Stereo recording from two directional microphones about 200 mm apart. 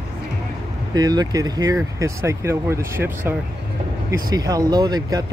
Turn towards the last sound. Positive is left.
turn(degrees=-20)  # may be behind; listen again after turning